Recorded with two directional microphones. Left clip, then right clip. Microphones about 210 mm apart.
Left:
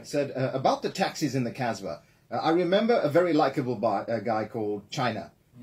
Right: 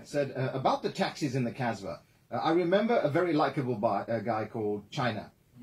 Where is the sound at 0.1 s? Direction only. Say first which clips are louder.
Left 3 dB; 55° left (ahead or behind).